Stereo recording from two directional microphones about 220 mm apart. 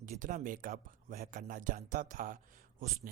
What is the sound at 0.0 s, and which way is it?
Speech, 35° right (ahead or behind).